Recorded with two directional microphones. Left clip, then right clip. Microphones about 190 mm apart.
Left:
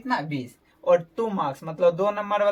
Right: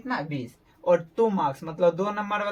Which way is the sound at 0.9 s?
25° right (ahead or behind).